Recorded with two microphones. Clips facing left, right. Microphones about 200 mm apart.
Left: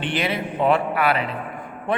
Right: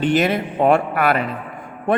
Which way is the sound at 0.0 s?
45° right (ahead or behind).